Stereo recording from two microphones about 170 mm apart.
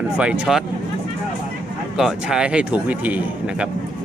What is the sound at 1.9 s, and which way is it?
Speech, 5° right (ahead or behind).